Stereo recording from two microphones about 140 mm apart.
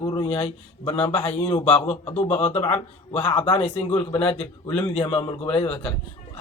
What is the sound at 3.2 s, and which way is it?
A man's voice, 40° left (ahead or behind).